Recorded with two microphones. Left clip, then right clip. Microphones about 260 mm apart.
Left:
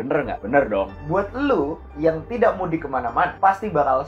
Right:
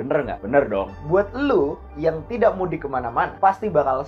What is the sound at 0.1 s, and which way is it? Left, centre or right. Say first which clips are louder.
Speech: even; right.